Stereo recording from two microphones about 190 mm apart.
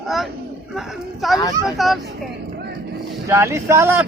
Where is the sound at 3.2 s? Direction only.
15° right (ahead or behind).